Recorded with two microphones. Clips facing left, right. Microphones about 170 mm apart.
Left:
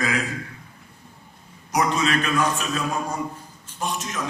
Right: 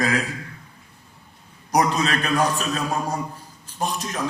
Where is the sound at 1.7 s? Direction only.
35° right (ahead or behind).